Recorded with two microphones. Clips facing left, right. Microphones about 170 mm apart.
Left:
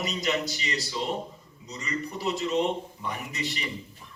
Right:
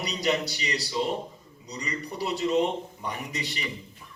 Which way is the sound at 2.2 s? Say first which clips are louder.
Right 2 dB; 40° left (ahead or behind).